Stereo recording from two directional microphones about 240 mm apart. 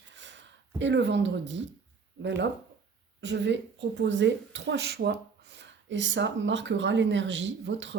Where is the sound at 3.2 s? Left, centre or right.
Right.